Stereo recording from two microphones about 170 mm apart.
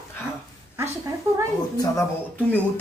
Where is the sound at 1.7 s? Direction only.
20° left (ahead or behind).